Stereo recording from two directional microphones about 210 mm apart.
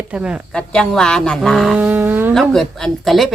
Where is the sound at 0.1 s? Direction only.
5° right (ahead or behind).